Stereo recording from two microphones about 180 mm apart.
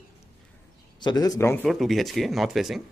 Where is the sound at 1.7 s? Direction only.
Centre (ahead or behind).